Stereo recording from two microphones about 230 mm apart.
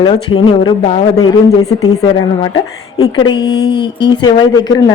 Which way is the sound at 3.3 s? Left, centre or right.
Centre.